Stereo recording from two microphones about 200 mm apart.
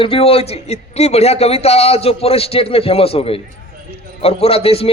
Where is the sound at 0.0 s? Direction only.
30° left (ahead or behind).